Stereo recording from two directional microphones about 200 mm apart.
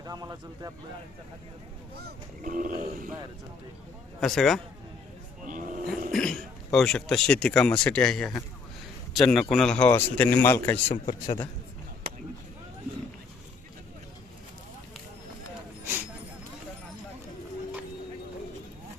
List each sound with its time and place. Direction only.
0.0 s speech: 20° right (ahead or behind)
2.0 s speech: 50° right (ahead or behind)
4.2 s speech: centre (ahead or behind)
5.5 s roaring cats: 40° right (ahead or behind)
6.1 s speech: centre (ahead or behind)
10.8 s speech: 35° left (ahead or behind)